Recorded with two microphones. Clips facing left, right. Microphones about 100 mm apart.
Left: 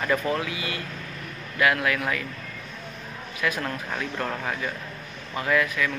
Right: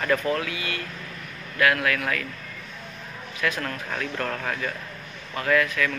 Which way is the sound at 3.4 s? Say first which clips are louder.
Even; 20° left (ahead or behind).